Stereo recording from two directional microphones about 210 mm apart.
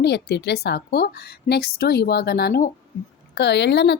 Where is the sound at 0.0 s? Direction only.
50° left (ahead or behind).